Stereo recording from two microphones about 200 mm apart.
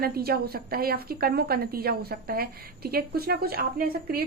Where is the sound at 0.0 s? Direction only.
50° right (ahead or behind).